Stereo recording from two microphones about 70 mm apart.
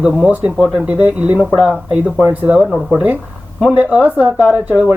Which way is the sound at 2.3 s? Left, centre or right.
Right.